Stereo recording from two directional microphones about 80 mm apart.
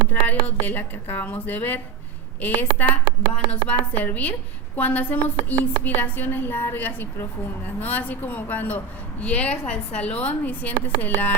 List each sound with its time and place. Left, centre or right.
0.4 s a woman's voice: left